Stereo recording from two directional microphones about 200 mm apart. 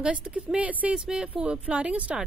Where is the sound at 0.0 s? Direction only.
5° right (ahead or behind).